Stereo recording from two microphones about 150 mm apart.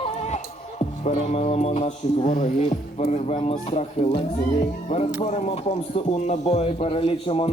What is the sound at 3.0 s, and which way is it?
Speech, 45° left (ahead or behind).